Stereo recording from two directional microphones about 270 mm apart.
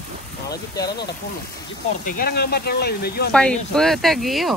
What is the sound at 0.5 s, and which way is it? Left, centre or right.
Speech, left.